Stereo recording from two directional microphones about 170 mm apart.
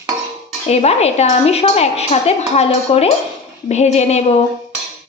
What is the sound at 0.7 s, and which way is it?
A woman's voice, 40° left (ahead or behind).